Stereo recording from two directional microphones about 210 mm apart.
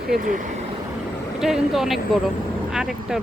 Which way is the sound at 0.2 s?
40° right (ahead or behind).